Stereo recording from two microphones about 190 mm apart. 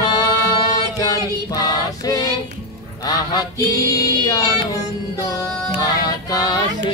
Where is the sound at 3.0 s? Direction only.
20° left (ahead or behind).